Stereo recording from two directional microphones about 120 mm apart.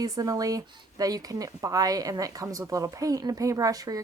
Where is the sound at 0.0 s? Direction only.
30° right (ahead or behind).